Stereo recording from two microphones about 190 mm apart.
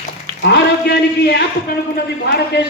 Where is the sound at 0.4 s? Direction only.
60° left (ahead or behind).